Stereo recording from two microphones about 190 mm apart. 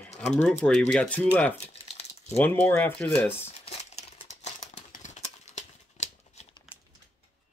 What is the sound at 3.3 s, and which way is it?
Crumpling, 30° left (ahead or behind).